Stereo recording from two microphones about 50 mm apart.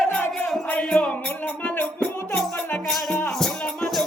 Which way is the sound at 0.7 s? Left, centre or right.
Left.